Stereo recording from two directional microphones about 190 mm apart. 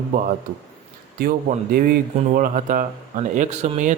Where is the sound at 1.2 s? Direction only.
50° right (ahead or behind).